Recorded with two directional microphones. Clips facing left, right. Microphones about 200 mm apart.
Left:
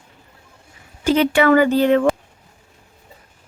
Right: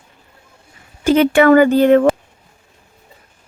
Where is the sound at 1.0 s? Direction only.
50° right (ahead or behind).